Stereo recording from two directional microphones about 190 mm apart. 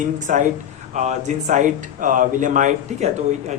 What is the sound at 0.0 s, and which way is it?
Speech, 40° right (ahead or behind).